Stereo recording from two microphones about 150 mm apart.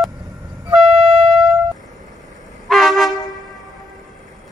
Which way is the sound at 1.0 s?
35° right (ahead or behind).